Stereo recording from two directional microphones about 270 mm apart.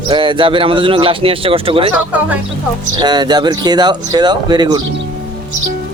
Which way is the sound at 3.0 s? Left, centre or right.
Centre.